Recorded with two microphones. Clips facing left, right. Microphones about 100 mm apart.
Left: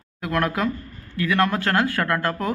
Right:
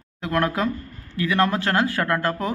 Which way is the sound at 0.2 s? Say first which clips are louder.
Right 1 dB; 25° right (ahead or behind).